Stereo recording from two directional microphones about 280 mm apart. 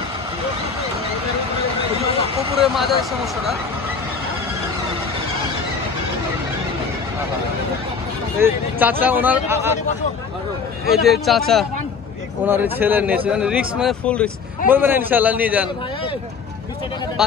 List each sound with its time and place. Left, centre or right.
2.6 s a man's voice: centre
8.4 s speech: centre
10.9 s a man's voice: centre
14.7 s speech: centre